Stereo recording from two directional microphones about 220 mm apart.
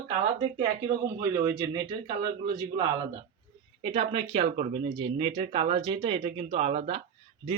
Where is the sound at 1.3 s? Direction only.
15° right (ahead or behind).